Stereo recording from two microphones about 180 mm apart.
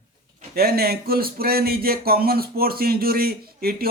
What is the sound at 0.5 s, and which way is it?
Speech, 60° right (ahead or behind).